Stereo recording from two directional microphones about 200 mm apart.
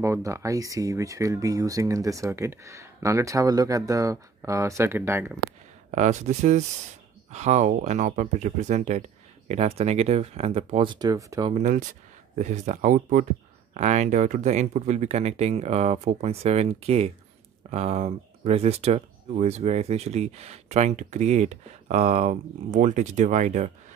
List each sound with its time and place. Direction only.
0.0 s speech: 15° right (ahead or behind)
5.9 s speech: 35° right (ahead or behind); by 11.5 s 15° right (ahead or behind)
11.5 s speech: 40° right (ahead or behind)